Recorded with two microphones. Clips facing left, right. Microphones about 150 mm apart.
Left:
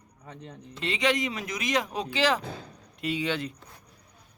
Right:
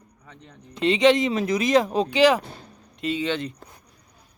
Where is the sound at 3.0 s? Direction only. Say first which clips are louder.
Right 4 dB; 10° left (ahead or behind).